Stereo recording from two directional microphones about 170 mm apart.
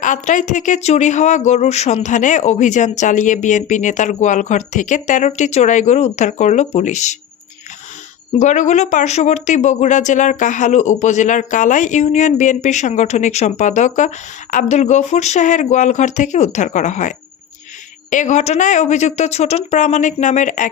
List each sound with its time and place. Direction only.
0.0 s speech: 50° left (ahead or behind)
8.4 s speech: 45° left (ahead or behind)